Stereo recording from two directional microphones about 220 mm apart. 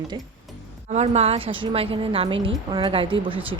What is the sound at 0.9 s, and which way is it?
Speech, 30° right (ahead or behind).